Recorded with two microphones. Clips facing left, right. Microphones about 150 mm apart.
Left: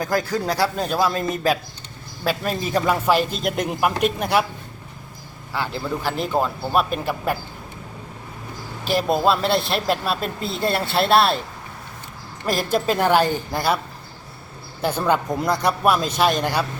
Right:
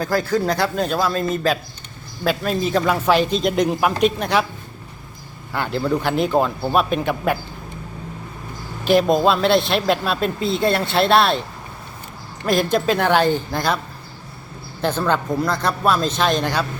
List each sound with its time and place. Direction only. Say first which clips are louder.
0.1 s speech: right 1 dB; 15° left (ahead or behind)
0.5 s speech: right 1 dB; 5° left (ahead or behind)
5.5 s speech: right 5 dB; centre (ahead or behind)
8.9 s speech: right 4 dB; 5° left (ahead or behind)
12.5 s speech: right 3 dB; 5° left (ahead or behind)
14.8 s speech: even; 10° left (ahead or behind)